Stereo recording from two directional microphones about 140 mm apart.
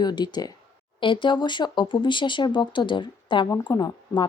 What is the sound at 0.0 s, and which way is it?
A woman's voice, 30° left (ahead or behind).